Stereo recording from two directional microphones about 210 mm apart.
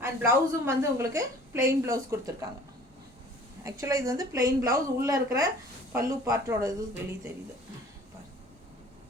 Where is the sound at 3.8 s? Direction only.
15° right (ahead or behind).